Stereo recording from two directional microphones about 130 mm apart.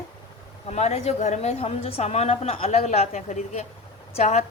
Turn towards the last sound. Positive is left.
turn(degrees=55)  # may be behind; listen again after turning